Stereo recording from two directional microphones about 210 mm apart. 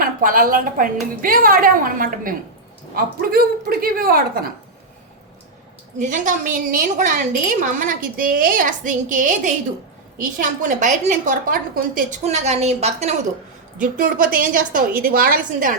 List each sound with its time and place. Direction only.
0.0 s a woman's voice: 40° right (ahead or behind)
6.0 s a woman's voice: 35° right (ahead or behind)
12.2 s a woman's voice: 30° right (ahead or behind)